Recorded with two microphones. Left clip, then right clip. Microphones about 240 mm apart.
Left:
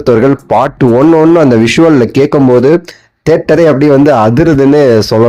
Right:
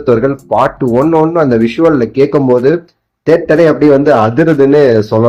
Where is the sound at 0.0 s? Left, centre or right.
Left.